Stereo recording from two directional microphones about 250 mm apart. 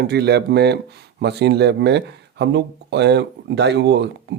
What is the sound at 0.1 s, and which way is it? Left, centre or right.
Speech, right.